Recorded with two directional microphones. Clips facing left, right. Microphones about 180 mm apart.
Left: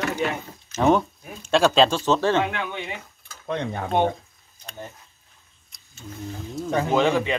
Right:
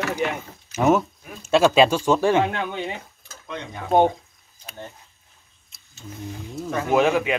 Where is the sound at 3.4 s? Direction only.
55° left (ahead or behind).